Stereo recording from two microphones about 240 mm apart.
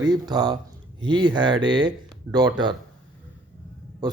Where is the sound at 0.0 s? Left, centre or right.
Centre.